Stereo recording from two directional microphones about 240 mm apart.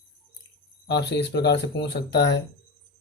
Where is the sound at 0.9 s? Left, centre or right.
Left.